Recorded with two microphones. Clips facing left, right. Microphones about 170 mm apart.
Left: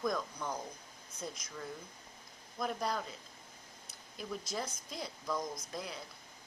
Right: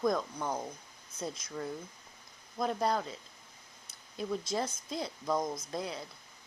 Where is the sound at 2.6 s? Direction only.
30° right (ahead or behind).